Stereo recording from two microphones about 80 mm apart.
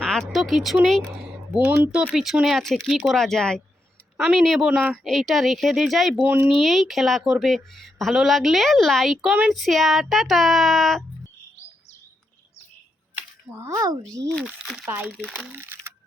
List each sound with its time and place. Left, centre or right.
0.0 s speech: centre
1.5 s speech: right
2.1 s a woman's voice: centre
6.2 s speech: centre
6.5 s a woman's voice: centre
13.6 s speech: right
14.6 s speech: centre
15.5 s speech: right